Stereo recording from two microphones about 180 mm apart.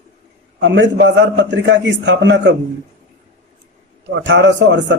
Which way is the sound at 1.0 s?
80° right.